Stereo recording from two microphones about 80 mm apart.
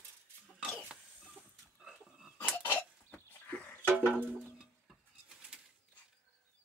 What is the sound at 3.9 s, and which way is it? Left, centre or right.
Music, right.